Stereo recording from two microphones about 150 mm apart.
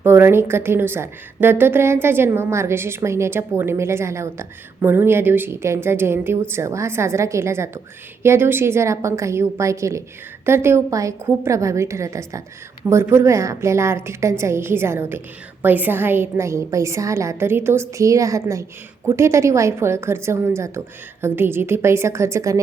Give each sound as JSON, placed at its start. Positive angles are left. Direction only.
{"t": 0.0, "sound": "a woman's voice", "side_deg": -15}